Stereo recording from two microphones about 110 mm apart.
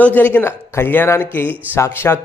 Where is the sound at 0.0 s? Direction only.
15° left (ahead or behind).